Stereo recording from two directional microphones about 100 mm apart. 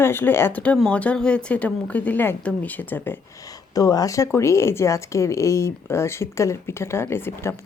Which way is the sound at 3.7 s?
35° left (ahead or behind).